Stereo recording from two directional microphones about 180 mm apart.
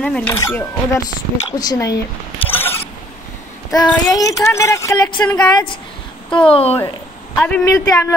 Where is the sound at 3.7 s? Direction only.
20° left (ahead or behind).